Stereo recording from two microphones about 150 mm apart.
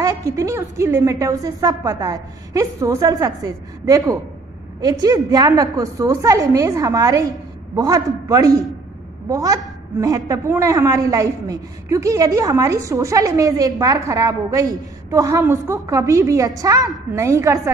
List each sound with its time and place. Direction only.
0.0 s a woman's voice: 20° right (ahead or behind)